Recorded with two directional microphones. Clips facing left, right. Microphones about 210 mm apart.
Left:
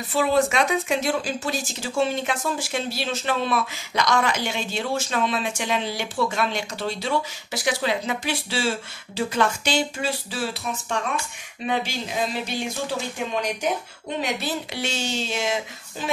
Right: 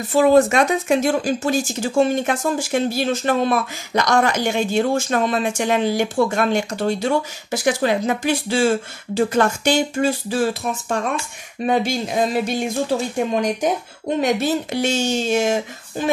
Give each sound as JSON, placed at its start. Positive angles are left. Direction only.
{"t": 0.1, "sound": "speech", "side_deg": -45}